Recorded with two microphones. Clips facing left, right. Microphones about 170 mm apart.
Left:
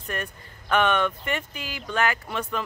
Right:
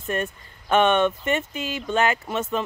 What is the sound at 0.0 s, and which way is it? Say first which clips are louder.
Speech: right 6 dB; 25° right (ahead or behind).